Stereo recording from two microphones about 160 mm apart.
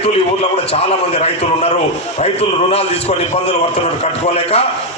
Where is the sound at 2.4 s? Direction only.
40° left (ahead or behind).